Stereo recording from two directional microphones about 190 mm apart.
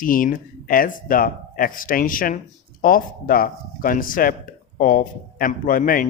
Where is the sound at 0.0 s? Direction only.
45° left (ahead or behind).